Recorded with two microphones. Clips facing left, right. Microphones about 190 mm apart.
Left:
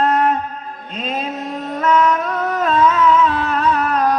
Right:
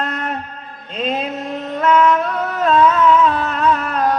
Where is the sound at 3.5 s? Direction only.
35° left (ahead or behind).